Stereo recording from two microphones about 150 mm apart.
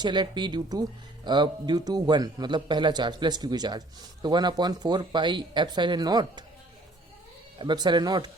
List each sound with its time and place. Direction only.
0.0 s speech: 30° right (ahead or behind)
7.6 s speech: 30° right (ahead or behind)